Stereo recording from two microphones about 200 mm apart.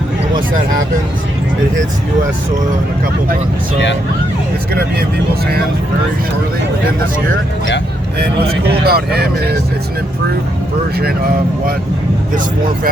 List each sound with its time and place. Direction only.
4.7 s speech: 50° right (ahead or behind)
8.9 s speech: 50° right (ahead or behind)